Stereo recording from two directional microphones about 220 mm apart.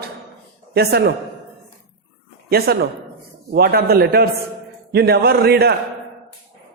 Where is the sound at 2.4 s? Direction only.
45° right (ahead or behind).